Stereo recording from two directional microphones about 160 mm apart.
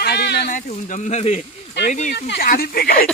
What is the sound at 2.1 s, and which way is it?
Speech, 90° left.